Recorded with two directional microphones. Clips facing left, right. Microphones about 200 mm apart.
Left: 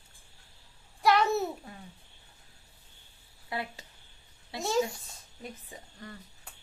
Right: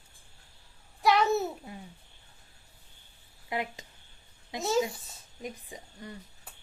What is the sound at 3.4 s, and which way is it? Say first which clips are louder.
A woman's voice: right 3 dB; 15° right (ahead or behind).